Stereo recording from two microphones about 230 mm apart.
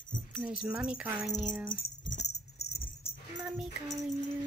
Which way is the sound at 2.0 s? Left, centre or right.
Left.